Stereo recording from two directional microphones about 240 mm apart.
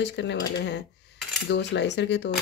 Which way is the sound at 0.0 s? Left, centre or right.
Left.